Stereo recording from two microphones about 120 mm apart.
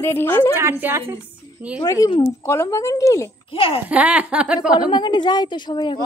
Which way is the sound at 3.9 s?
10° right (ahead or behind).